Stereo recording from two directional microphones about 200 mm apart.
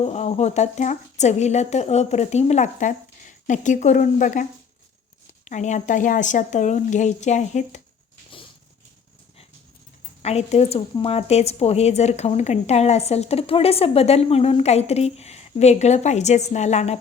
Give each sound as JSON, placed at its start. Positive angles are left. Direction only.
{"t": 0.0, "sound": "a woman's voice", "side_deg": 35}
{"t": 5.5, "sound": "a woman's voice", "side_deg": 35}
{"t": 10.2, "sound": "a woman's voice", "side_deg": 30}